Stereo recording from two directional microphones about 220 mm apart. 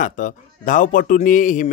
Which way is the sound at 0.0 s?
35° left (ahead or behind).